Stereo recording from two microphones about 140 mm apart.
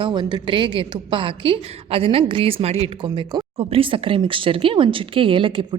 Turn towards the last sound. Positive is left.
turn(degrees=-40)  # may be behind; listen again after turning